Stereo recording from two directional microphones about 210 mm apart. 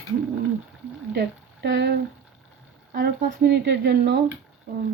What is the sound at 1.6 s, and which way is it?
Speech, 55° right (ahead or behind).